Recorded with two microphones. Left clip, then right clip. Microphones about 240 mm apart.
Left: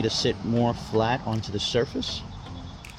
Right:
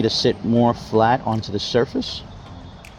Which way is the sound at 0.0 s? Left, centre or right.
Right.